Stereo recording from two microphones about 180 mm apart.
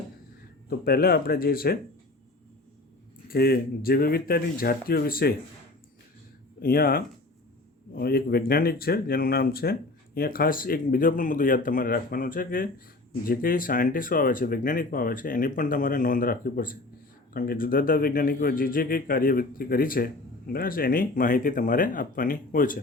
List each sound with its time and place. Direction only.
0.7 s speech: 55° left (ahead or behind)
3.2 s speech: 55° left (ahead or behind)
6.6 s speech: 55° left (ahead or behind)